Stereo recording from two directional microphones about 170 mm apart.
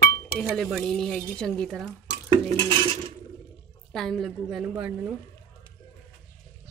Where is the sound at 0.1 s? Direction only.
15° left (ahead or behind).